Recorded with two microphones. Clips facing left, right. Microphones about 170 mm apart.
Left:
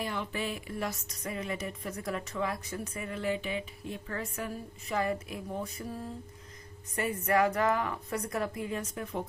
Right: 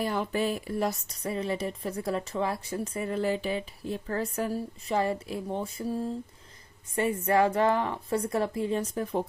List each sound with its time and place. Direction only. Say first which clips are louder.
0.0 s a woman's voice: right 6 dB; 40° right (ahead or behind)